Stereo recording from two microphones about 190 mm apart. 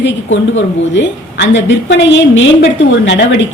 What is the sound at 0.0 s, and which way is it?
A woman's voice, 80° left.